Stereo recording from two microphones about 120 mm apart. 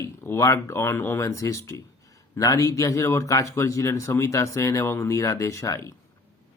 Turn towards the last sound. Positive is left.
turn(degrees=25)  # may be behind; listen again after turning